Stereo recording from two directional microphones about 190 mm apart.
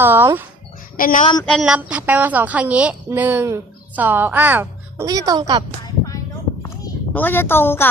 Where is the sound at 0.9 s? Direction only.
45° left (ahead or behind).